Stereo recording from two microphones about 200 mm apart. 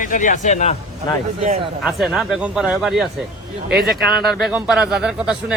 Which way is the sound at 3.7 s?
55° right (ahead or behind).